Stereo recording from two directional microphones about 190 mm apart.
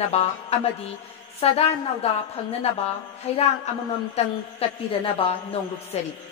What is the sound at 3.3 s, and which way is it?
A woman's voice, 35° left (ahead or behind).